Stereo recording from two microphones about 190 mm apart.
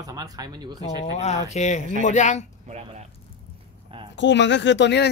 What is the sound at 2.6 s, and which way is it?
Speech, 35° right (ahead or behind).